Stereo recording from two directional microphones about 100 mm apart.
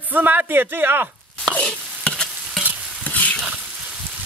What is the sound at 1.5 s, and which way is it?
Sizzle, 10° left (ahead or behind).